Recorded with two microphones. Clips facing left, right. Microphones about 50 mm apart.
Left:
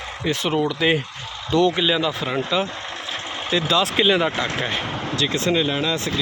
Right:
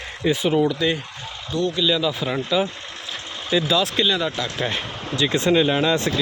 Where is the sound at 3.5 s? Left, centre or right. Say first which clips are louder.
Even; centre.